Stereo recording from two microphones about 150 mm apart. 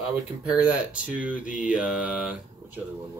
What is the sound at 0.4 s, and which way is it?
Speech, 10° right (ahead or behind).